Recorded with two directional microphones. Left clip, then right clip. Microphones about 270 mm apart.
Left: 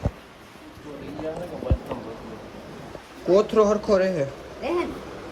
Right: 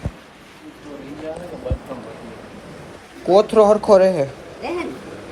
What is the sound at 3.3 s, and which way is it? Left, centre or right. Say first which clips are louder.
Speech: right 6 dB; centre.